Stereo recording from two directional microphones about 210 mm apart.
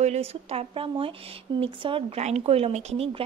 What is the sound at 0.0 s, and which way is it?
A woman's voice, 30° right (ahead or behind).